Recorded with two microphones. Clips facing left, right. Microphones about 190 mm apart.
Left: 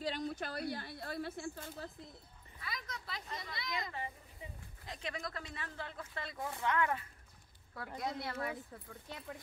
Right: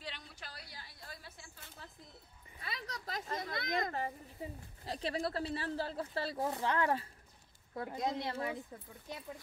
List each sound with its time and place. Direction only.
0.0 s a woman's voice: 40° left (ahead or behind)
2.6 s speech: 30° right (ahead or behind)
3.1 s speech: 45° right (ahead or behind); by 9.2 s 15° right (ahead or behind)